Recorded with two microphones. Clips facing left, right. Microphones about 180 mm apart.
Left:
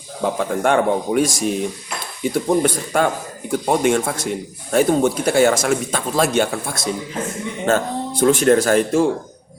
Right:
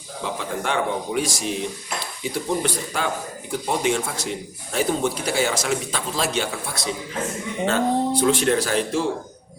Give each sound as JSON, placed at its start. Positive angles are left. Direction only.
{"t": 0.2, "sound": "a man's voice", "side_deg": 50}